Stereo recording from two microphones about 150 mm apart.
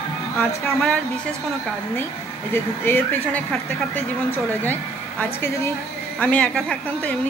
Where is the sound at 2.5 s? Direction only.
15° left (ahead or behind).